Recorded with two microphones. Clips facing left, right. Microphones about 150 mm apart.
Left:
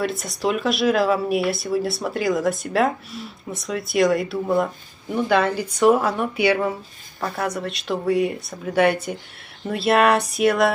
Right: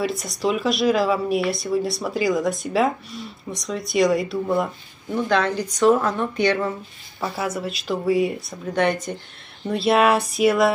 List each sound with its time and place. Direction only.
0.0 s speech: centre (ahead or behind)
7.2 s speech: 5° right (ahead or behind)